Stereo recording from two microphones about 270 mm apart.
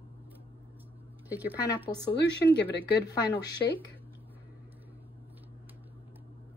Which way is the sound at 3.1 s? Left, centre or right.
Centre.